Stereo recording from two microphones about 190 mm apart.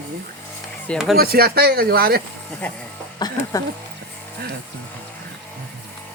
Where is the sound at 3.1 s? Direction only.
20° left (ahead or behind).